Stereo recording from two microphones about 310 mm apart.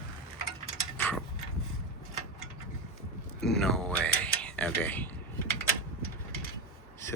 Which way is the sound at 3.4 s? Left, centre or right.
Centre.